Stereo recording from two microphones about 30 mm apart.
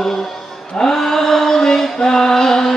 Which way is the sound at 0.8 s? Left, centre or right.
Centre.